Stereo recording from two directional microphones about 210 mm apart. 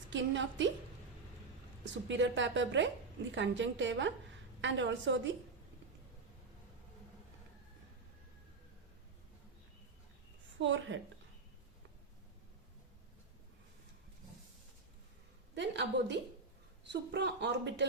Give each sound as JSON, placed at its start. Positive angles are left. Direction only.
{"t": 0.1, "sound": "speech", "side_deg": -60}
{"t": 2.0, "sound": "speech", "side_deg": -60}
{"t": 10.6, "sound": "speech", "side_deg": -60}
{"t": 15.5, "sound": "speech", "side_deg": -55}